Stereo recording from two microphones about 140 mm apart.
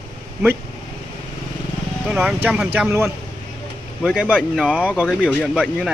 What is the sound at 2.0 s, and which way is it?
Speech, 10° right (ahead or behind).